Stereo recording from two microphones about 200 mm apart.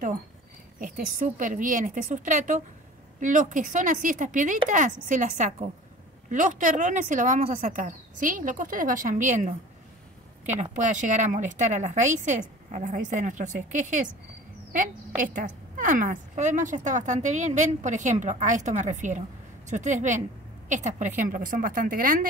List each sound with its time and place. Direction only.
0.7 s a woman's voice: 45° right (ahead or behind)